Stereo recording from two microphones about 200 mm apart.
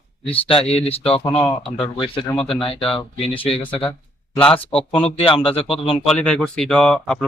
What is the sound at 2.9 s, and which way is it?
Speech, 25° left (ahead or behind).